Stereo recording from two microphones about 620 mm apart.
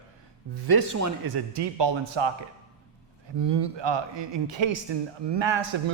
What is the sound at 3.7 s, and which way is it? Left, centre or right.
A man's voice, right.